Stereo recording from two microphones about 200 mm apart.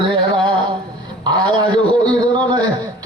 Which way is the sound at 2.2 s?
20° right (ahead or behind).